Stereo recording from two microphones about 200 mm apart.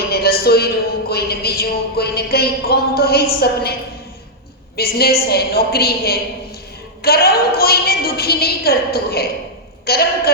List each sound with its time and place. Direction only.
0.1 s a sound: 50° left (ahead or behind)
1.1 s speech: 50° left (ahead or behind)
4.8 s speech: 50° left (ahead or behind)